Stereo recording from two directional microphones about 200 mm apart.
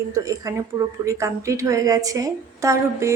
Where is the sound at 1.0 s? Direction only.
15° right (ahead or behind).